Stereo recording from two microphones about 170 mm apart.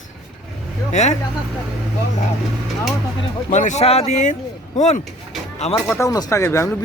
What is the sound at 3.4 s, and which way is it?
Speech, 45° left (ahead or behind).